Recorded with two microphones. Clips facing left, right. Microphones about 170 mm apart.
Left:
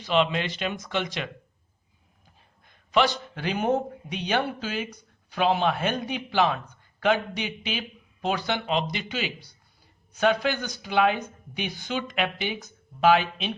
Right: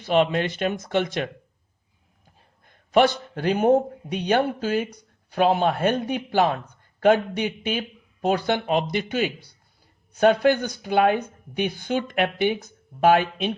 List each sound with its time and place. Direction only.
0.0 s speech: 50° right (ahead or behind)
2.6 s a man's voice: 55° right (ahead or behind)